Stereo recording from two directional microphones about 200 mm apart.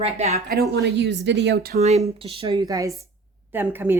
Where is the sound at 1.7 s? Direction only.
35° right (ahead or behind); by 4.0 s 10° right (ahead or behind).